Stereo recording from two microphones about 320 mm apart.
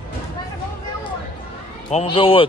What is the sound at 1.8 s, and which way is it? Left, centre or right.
Speech, centre.